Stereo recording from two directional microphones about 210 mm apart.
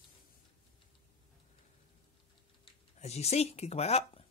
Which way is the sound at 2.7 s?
30° left (ahead or behind).